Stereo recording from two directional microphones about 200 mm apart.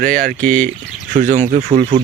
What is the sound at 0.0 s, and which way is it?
Speech, 40° right (ahead or behind).